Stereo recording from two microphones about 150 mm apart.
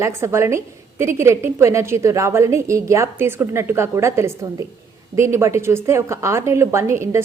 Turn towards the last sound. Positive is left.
turn(degrees=-20)  # may be behind; listen again after turning